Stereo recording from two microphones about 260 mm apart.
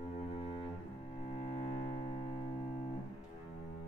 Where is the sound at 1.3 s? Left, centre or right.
Left.